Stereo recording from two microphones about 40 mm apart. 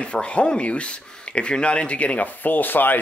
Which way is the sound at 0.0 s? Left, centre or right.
Left.